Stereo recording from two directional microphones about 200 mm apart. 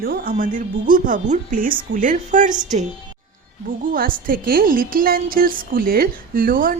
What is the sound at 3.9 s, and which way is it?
A woman's voice, 45° right (ahead or behind).